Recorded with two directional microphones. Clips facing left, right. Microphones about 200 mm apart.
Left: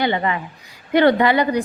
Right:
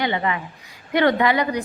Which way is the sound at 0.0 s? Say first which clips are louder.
Left 3 dB; 35° left (ahead or behind).